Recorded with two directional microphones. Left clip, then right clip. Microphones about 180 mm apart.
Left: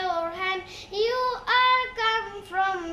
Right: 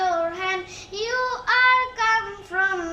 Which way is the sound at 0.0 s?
20° left (ahead or behind).